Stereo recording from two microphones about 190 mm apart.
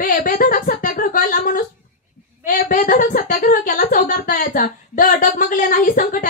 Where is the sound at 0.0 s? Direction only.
50° left (ahead or behind).